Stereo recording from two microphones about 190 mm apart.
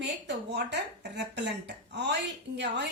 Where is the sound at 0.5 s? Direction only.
65° right (ahead or behind).